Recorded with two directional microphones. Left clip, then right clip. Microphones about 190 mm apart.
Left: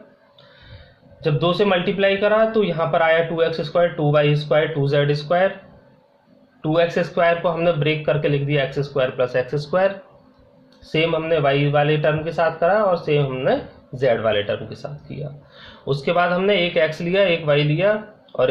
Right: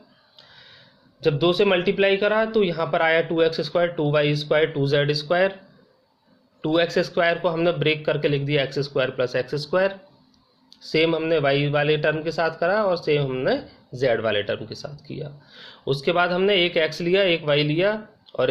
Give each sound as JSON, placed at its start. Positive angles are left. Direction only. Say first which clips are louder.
{"t": 1.2, "sound": "a man's voice", "louder": "even", "side_deg": -45}
{"t": 6.6, "sound": "a man's voice", "louder": "left 2 dB", "side_deg": -50}